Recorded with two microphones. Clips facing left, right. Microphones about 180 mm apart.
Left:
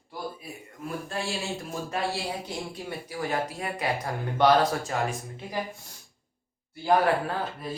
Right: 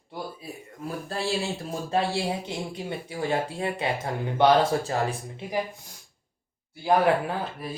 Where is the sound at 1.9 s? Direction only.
25° right (ahead or behind).